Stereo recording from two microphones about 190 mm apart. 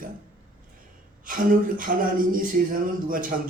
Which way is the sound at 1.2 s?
45° right (ahead or behind).